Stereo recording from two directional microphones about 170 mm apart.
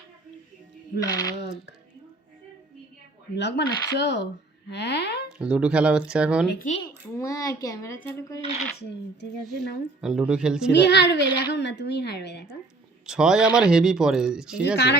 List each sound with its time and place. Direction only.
0.9 s speech: 20° left (ahead or behind)
3.3 s speech: 90° left
5.4 s a woman's voice: 5° right (ahead or behind)
7.2 s speech: 20° left (ahead or behind)
9.4 s a woman's voice: centre (ahead or behind)
10.7 s speech: 85° left
13.1 s a woman's voice: 5° right (ahead or behind)